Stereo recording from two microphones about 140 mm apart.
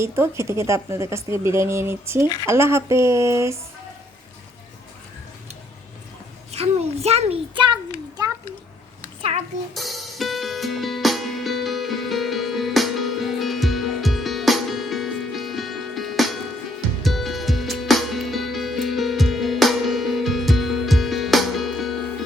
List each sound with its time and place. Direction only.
0.0 s speech: 20° right (ahead or behind)
6.5 s a child's voice: 50° right (ahead or behind)
9.7 s music: centre (ahead or behind)